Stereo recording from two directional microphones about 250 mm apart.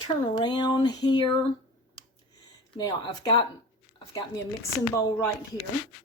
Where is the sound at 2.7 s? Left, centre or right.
Centre.